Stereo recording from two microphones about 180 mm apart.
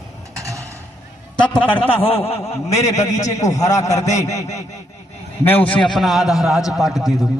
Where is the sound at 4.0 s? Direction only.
40° left (ahead or behind).